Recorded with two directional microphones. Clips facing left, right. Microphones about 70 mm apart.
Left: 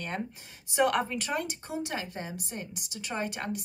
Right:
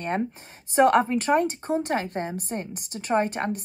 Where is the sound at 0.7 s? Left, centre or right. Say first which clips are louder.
Right 8 dB; right.